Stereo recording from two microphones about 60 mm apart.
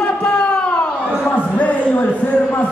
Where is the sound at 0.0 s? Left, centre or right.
Centre.